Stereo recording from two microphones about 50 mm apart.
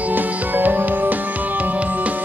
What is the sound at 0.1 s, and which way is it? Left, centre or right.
Music, right.